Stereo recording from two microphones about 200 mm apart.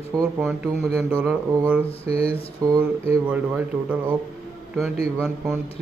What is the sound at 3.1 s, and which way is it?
Speech, 5° right (ahead or behind).